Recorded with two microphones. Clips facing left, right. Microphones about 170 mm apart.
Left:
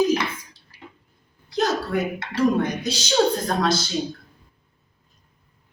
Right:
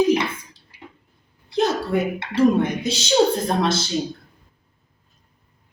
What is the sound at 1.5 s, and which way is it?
A woman's voice, 25° right (ahead or behind).